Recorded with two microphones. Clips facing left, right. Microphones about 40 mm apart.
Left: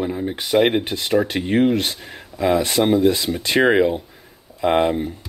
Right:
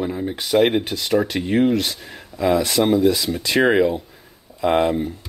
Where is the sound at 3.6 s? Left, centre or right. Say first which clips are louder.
Left 1 dB; centre.